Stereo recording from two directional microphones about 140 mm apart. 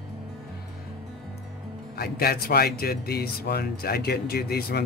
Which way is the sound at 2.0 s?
90° left.